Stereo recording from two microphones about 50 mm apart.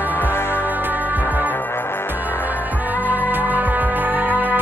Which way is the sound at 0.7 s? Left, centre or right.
Right.